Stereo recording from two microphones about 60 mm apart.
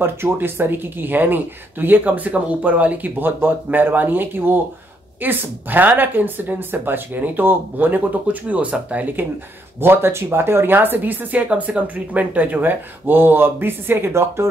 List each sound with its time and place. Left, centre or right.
0.0 s speech: right
9.8 s speech: right